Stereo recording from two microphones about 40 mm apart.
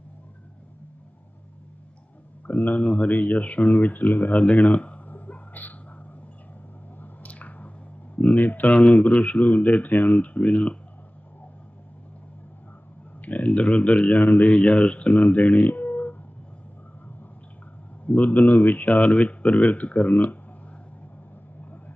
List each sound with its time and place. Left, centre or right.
2.5 s speech: left
5.0 s a sound: left
7.0 s squish: left
8.1 s speech: left
13.2 s speech: left
15.1 s speech: left
18.0 s speech: left